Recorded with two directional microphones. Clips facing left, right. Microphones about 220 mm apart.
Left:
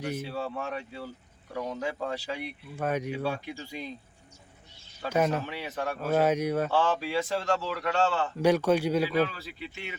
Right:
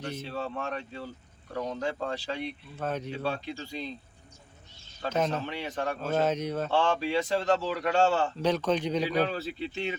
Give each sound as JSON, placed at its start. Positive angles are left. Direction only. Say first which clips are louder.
{"t": 0.0, "sound": "speech", "louder": "left 2 dB", "side_deg": 10}
{"t": 5.0, "sound": "speech", "louder": "left 2 dB", "side_deg": 10}
{"t": 7.7, "sound": "speech", "louder": "right 2 dB", "side_deg": -20}
{"t": 8.4, "sound": "speech", "louder": "left 4 dB", "side_deg": 10}
{"t": 9.3, "sound": "speech", "louder": "right 8 dB", "side_deg": -25}